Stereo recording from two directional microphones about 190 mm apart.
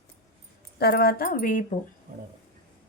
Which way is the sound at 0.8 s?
55° left (ahead or behind).